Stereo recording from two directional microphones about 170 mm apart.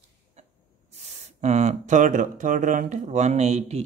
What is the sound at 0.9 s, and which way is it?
Speech, 40° right (ahead or behind).